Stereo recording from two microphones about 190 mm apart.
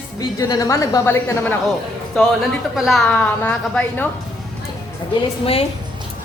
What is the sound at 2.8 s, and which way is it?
A woman's voice, centre (ahead or behind).